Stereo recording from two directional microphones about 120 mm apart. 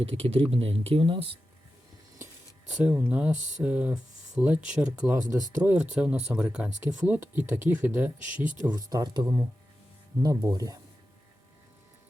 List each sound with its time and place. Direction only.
0.0 s speech: 55° right (ahead or behind)
2.7 s speech: 15° right (ahead or behind)
5.3 s speech: 25° right (ahead or behind); by 6.4 s 5° right (ahead or behind)
7.1 s speech: 20° right (ahead or behind)
8.7 s speech: 30° right (ahead or behind)